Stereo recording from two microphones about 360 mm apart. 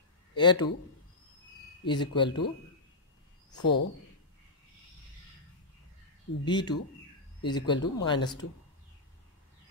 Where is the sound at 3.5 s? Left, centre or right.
Left.